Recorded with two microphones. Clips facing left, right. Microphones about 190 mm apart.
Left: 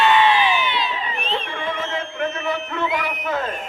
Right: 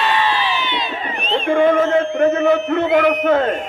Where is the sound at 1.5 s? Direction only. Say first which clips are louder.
Right 13 dB; 50° right (ahead or behind).